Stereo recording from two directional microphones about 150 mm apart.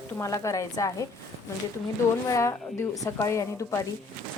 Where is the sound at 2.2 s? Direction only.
20° left (ahead or behind).